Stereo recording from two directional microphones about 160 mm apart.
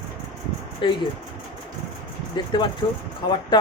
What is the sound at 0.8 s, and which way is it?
Speech, 30° left (ahead or behind).